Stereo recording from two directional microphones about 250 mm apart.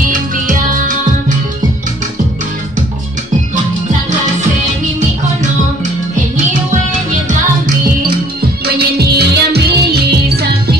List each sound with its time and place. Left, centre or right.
0.1 s music: right
8.6 s music: right